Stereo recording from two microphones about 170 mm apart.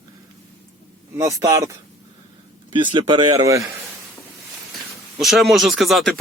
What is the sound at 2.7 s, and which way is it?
Speech, 30° right (ahead or behind).